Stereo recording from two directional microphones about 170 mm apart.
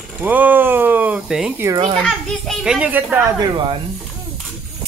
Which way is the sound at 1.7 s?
35° right (ahead or behind).